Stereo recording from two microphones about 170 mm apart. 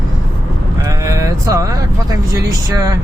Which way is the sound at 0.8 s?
15° right (ahead or behind).